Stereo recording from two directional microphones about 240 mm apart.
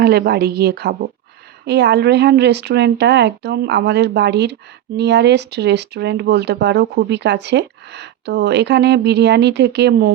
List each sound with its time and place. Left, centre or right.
0.0 s a woman's voice: right